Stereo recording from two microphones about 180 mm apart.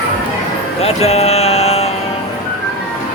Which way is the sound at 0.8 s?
35° left (ahead or behind).